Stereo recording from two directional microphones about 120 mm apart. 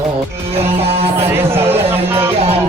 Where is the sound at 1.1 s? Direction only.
20° right (ahead or behind).